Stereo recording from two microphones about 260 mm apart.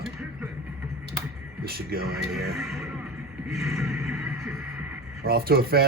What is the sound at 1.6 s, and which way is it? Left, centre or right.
Speech, right.